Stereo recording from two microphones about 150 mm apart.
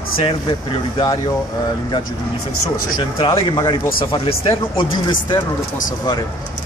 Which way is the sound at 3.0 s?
30° left (ahead or behind).